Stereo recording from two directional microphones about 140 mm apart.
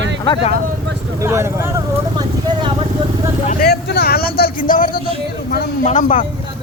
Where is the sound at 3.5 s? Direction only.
90° left.